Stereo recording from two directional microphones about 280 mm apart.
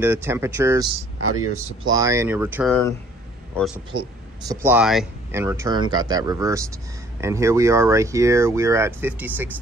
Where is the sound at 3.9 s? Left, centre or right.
Centre.